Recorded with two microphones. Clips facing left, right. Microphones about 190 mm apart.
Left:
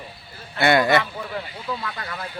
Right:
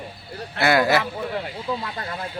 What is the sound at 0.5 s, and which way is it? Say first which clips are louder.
Speech: left 1 dB; centre (ahead or behind).